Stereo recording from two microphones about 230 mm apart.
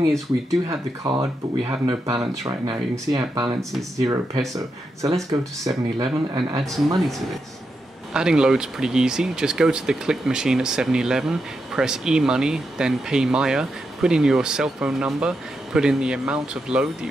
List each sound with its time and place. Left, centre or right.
0.7 s speech: centre
8.1 s speech: centre